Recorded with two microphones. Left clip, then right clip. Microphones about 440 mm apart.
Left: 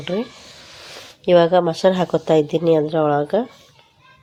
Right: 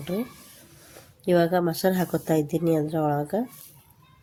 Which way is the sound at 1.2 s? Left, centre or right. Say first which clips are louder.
Left 8 dB; right.